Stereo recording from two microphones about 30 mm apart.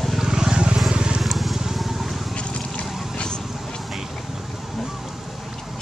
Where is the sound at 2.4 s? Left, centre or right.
Left.